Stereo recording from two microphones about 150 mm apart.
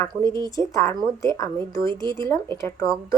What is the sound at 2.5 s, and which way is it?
Speech, 20° left (ahead or behind).